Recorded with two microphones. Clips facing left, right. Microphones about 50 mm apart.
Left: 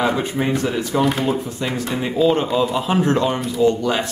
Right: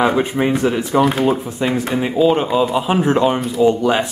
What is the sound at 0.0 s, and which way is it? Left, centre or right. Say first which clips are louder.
Speech: right 4 dB; centre.